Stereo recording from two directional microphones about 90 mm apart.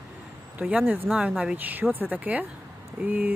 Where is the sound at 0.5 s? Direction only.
10° right (ahead or behind).